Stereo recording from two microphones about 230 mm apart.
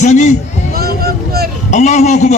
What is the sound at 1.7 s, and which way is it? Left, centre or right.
Speech, left.